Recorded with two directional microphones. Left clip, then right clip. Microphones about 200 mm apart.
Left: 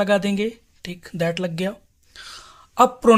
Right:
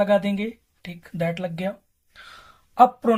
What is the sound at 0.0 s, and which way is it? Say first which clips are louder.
A man's voice: left 1 dB; 65° left (ahead or behind).